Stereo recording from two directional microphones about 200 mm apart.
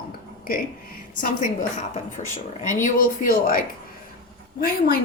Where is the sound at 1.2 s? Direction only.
40° left (ahead or behind).